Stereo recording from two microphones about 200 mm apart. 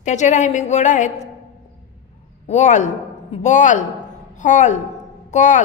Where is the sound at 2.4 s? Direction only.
35° left (ahead or behind).